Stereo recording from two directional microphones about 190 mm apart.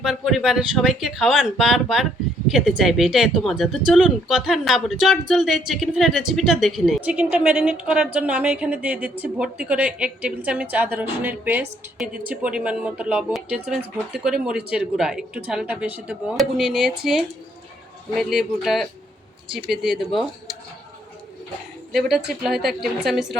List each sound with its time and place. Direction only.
0.0 s a woman's voice: centre (ahead or behind)
21.9 s speech: centre (ahead or behind)